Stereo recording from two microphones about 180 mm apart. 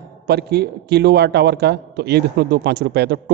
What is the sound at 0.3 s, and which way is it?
A man's voice, 65° right (ahead or behind).